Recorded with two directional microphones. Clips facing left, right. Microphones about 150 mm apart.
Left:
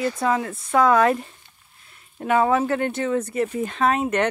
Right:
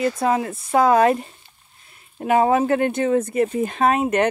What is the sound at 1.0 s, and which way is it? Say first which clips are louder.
Speech: right 2 dB; 20° right (ahead or behind).